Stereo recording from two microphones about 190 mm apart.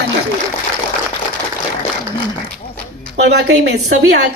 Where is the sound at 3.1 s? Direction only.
65° right (ahead or behind).